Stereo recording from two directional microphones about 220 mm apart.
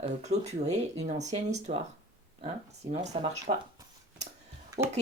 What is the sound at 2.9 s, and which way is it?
Speech, 30° right (ahead or behind).